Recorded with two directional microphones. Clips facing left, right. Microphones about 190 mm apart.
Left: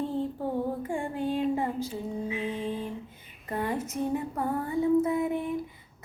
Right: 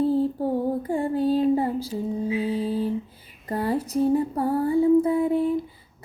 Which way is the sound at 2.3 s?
35° right (ahead or behind).